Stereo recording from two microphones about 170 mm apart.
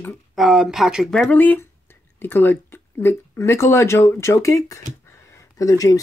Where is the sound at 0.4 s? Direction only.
5° right (ahead or behind).